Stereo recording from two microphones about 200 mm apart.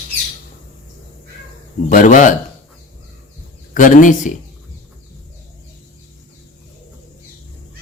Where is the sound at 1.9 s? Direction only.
40° left (ahead or behind).